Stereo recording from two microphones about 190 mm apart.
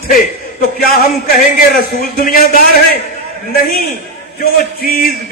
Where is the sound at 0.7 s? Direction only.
50° left (ahead or behind).